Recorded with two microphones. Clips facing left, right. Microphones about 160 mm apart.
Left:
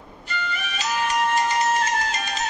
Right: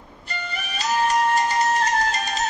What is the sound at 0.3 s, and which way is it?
Music, 40° right (ahead or behind).